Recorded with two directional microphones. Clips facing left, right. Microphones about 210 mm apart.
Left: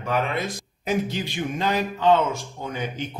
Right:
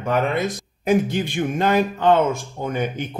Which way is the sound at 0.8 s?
50° right (ahead or behind).